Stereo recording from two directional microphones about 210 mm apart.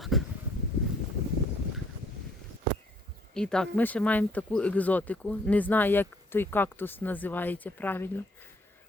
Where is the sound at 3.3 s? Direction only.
5° left (ahead or behind).